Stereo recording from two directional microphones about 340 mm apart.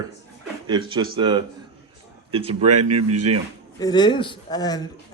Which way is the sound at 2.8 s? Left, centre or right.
Right.